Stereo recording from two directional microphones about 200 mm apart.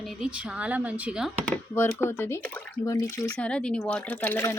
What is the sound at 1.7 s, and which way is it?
Speech, 10° left (ahead or behind).